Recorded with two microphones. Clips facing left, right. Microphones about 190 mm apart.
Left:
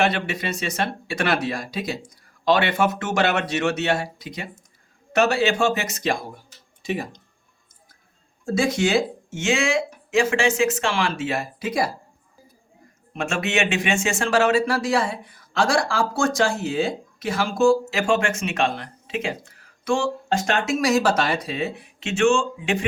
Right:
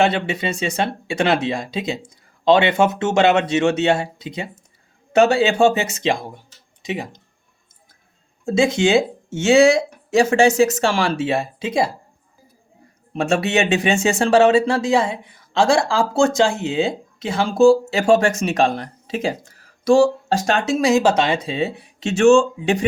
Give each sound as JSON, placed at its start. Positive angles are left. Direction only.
{"t": 0.0, "sound": "speech", "side_deg": -25}
{"t": 8.4, "sound": "speech", "side_deg": -25}
{"t": 13.1, "sound": "speech", "side_deg": -35}